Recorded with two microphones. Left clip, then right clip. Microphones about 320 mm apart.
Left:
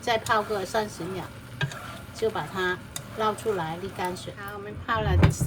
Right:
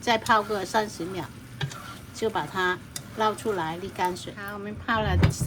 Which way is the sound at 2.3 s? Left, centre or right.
Right.